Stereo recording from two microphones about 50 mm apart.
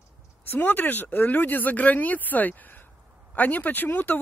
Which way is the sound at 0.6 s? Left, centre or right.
Left.